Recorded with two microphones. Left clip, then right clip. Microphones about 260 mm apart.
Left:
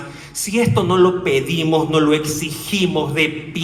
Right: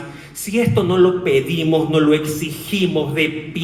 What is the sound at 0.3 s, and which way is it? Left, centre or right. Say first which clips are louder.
A man's voice: even; centre.